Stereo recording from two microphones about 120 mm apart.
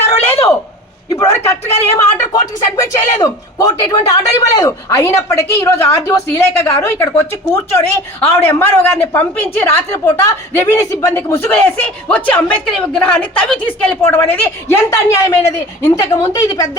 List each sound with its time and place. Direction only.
0.0 s a sound: 20° left (ahead or behind)
1.1 s a man's voice: 25° left (ahead or behind)
14.8 s a man's voice: 30° left (ahead or behind)